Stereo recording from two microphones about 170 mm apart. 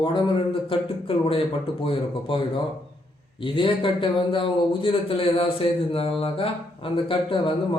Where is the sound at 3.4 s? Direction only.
30° left (ahead or behind).